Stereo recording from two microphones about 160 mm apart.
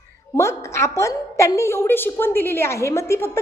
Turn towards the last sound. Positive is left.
turn(degrees=15)  # may be behind; listen again after turning